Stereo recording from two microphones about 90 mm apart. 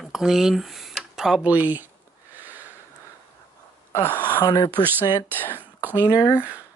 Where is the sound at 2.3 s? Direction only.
20° right (ahead or behind).